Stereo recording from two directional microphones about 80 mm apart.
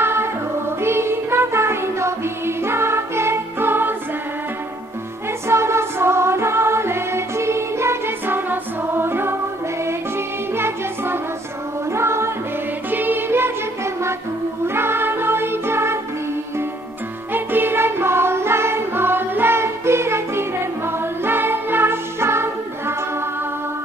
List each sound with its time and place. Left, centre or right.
0.0 s music: right
5.5 s music: right
10.5 s music: right
14.7 s music: right
17.3 s music: right